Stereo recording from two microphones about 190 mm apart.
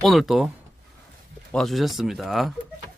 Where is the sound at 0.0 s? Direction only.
Centre (ahead or behind).